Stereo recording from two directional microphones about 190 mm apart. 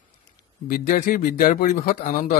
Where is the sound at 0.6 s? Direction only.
45° left (ahead or behind).